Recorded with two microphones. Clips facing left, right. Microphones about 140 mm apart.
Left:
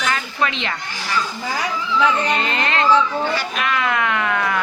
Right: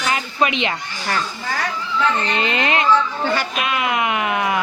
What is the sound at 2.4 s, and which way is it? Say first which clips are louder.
Speech: right 1 dB; 20° right (ahead or behind).